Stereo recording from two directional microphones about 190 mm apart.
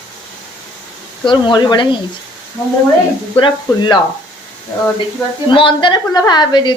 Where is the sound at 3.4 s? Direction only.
25° left (ahead or behind).